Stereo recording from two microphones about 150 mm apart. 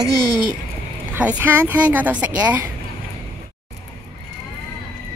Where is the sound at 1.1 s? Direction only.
10° right (ahead or behind).